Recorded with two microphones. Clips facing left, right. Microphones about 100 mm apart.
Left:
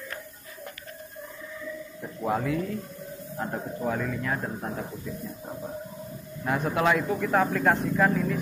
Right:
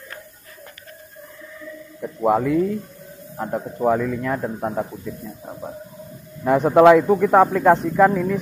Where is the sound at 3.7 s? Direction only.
65° right (ahead or behind).